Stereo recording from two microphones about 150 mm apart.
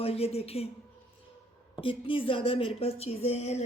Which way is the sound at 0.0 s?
40° left (ahead or behind).